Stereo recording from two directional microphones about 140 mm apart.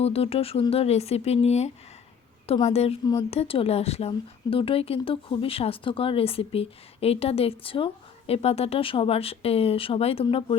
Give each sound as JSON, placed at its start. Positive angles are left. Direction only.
{"t": 0.0, "sound": "speech", "side_deg": 45}